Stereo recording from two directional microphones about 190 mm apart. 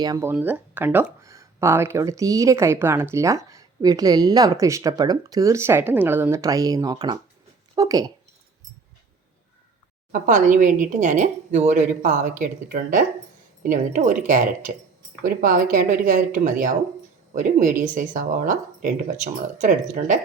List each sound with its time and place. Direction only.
0.0 s speech: 15° right (ahead or behind)
10.1 s speech: 45° right (ahead or behind)